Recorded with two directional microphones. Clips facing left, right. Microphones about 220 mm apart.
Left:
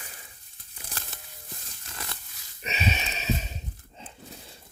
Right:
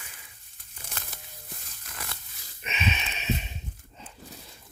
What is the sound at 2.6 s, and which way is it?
Wheeze, 35° left (ahead or behind).